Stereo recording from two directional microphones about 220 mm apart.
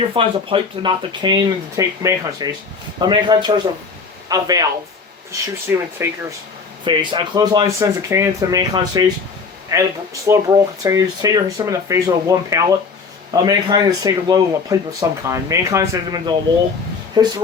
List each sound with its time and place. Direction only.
0.1 s speech: 25° right (ahead or behind)